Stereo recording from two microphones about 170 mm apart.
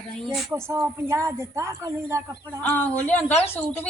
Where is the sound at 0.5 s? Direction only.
15° right (ahead or behind).